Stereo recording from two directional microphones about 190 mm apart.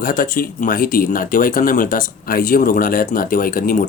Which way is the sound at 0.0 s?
45° left (ahead or behind).